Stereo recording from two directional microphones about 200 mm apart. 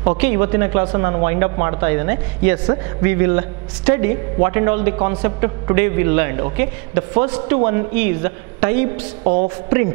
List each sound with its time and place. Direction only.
0.2 s a man's voice: 15° right (ahead or behind)
2.6 s a man's voice: 25° right (ahead or behind)
3.1 s a man's voice: 15° right (ahead or behind)
9.2 s a woman's voice: 45° right (ahead or behind)